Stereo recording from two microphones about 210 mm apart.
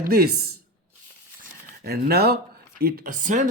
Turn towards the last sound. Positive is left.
turn(degrees=-40)  # may be behind; listen again after turning